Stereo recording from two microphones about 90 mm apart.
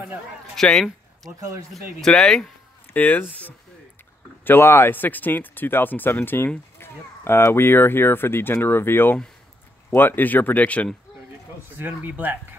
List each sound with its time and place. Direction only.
0.6 s speech: 5° left (ahead or behind)
2.9 s speech: 20° left (ahead or behind)
11.7 s speech: 20° right (ahead or behind)